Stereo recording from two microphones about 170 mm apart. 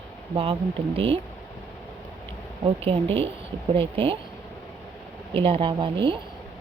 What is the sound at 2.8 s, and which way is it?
Speech, 35° right (ahead or behind).